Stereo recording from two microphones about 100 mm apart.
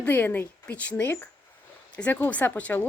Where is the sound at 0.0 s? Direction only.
20° left (ahead or behind).